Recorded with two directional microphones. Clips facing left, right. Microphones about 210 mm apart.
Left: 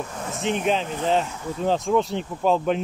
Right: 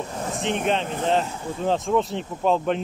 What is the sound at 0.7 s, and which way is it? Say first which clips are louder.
Speech: even; centre (ahead or behind).